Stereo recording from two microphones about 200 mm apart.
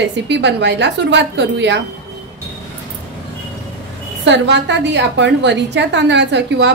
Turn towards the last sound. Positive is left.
turn(degrees=-60)  # may be behind; listen again after turning